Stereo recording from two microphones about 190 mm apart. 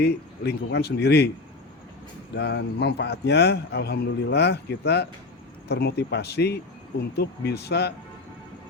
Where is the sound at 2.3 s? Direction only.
60° left (ahead or behind).